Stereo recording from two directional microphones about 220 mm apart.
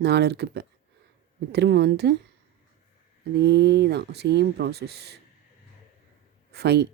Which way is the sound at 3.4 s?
50° right (ahead or behind).